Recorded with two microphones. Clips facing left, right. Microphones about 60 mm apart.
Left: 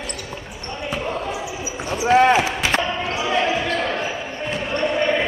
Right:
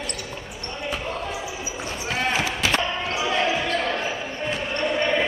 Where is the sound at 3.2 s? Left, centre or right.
Centre.